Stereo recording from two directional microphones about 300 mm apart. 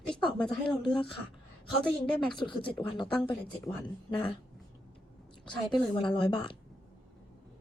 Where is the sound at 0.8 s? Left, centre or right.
Centre.